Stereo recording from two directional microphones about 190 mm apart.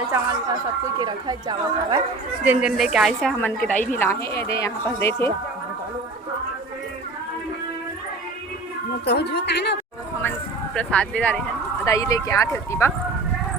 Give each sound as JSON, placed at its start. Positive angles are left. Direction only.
{"t": 0.9, "sound": "speech", "side_deg": -20}
{"t": 2.4, "sound": "a woman's voice", "side_deg": -5}
{"t": 9.0, "sound": "speech", "side_deg": 60}
{"t": 10.8, "sound": "a woman's voice", "side_deg": 5}
{"t": 11.9, "sound": "a woman's voice", "side_deg": 15}